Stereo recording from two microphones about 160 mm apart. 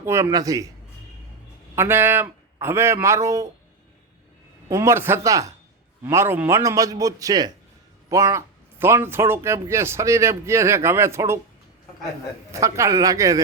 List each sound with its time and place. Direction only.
0.0 s a man's voice: 20° right (ahead or behind)
1.7 s speech: 15° right (ahead or behind)
4.7 s a man's voice: 15° right (ahead or behind)
12.5 s a man's voice: 20° right (ahead or behind)